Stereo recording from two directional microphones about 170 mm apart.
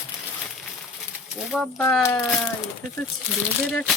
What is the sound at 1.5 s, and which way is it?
Speech, centre (ahead or behind).